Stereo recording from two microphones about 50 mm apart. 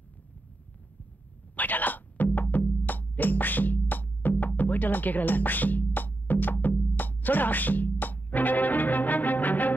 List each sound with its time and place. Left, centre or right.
1.6 s music: left